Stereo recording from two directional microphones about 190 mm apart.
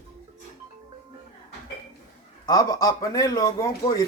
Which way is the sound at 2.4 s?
20° left (ahead or behind).